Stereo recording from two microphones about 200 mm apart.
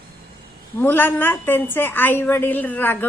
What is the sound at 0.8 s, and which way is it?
A woman's voice, 10° left (ahead or behind).